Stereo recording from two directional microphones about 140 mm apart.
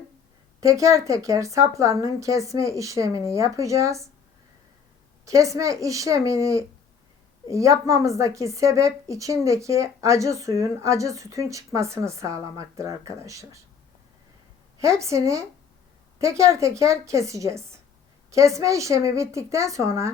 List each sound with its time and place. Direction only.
0.6 s speech: 25° right (ahead or behind)
5.2 s speech: 25° right (ahead or behind)
14.8 s speech: 20° right (ahead or behind)